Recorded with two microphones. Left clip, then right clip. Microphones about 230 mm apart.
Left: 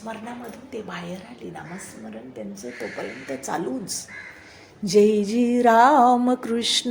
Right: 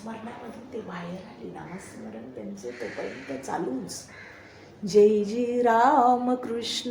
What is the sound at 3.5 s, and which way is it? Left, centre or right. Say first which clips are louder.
Music: left 3 dB; left.